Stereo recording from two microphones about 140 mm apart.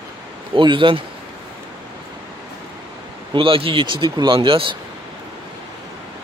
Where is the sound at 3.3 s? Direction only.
40° right (ahead or behind).